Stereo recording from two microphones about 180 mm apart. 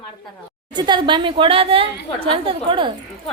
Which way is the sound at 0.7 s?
25° right (ahead or behind).